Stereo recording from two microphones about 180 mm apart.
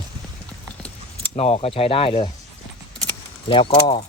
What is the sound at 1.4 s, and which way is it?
Speech, 35° left (ahead or behind).